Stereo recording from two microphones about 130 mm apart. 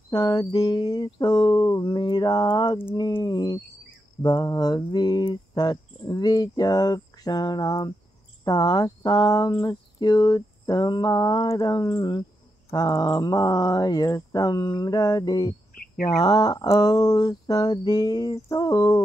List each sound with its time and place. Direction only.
0.1 s speech: 30° left (ahead or behind)
12.7 s mantra: 30° left (ahead or behind)